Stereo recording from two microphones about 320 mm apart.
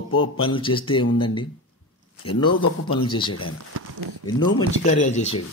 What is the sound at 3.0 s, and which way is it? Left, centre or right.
Speech, centre.